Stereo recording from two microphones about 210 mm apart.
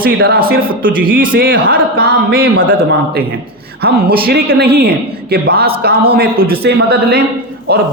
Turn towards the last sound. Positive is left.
turn(degrees=-50)  # may be behind; listen again after turning